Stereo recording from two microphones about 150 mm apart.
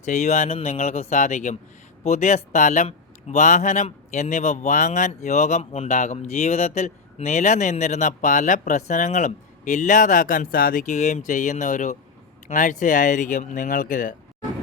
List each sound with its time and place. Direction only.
0.0 s speech: 50° left (ahead or behind)